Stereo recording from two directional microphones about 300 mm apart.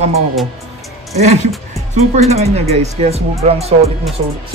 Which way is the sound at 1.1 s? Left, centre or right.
Right.